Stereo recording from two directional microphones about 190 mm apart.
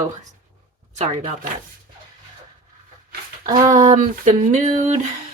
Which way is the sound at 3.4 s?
20° right (ahead or behind).